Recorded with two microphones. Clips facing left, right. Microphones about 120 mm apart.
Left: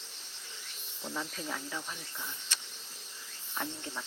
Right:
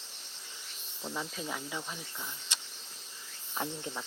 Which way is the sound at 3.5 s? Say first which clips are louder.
Right 2 dB; 15° right (ahead or behind).